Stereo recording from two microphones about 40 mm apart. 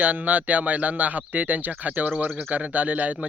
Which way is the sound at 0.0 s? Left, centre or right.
Right.